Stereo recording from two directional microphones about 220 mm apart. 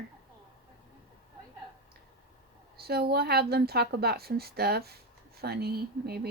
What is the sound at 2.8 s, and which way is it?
A woman's voice, 45° right (ahead or behind).